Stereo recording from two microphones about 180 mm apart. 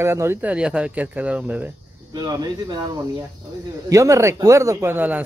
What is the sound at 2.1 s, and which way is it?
A man's voice, 20° right (ahead or behind).